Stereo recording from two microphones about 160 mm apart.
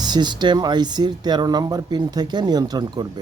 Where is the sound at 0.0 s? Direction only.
25° right (ahead or behind).